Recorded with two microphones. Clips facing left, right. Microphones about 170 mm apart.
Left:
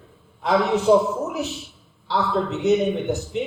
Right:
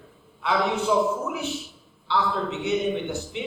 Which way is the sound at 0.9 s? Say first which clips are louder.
Left 7 dB; 45° left (ahead or behind).